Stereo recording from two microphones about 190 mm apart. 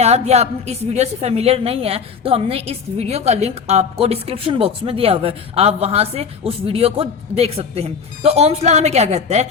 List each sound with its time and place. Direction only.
0.0 s a woman's voice: 35° right (ahead or behind)